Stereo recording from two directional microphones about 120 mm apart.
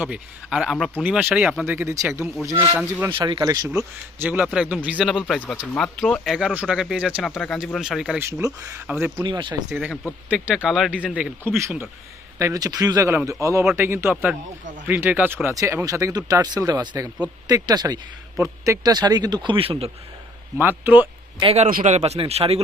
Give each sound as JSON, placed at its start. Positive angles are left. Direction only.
{"t": 0.0, "sound": "speech", "side_deg": -10}
{"t": 1.6, "sound": "speech", "side_deg": -20}
{"t": 3.1, "sound": "speech", "side_deg": -45}
{"t": 3.8, "sound": "speech", "side_deg": -15}
{"t": 5.3, "sound": "speech", "side_deg": 10}
{"t": 7.2, "sound": "speech", "side_deg": 5}
{"t": 8.2, "sound": "speech", "side_deg": -25}
{"t": 9.1, "sound": "speech", "side_deg": -40}
{"t": 9.6, "sound": "speech", "side_deg": -20}
{"t": 12.4, "sound": "speech", "side_deg": -30}
{"t": 20.6, "sound": "speech", "side_deg": -15}
{"t": 21.4, "sound": "speech", "side_deg": -65}